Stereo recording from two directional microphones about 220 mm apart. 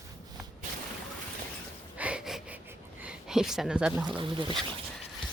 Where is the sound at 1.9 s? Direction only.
5° right (ahead or behind).